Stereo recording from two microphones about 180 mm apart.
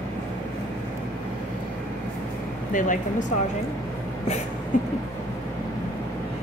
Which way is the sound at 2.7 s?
45° left (ahead or behind).